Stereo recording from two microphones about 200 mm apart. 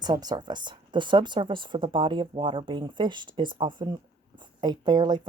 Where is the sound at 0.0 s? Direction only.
20° right (ahead or behind).